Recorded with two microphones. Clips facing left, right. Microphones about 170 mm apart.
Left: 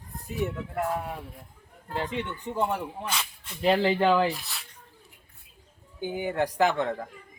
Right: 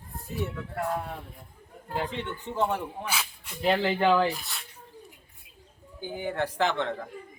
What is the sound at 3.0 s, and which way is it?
Speech, 5° right (ahead or behind).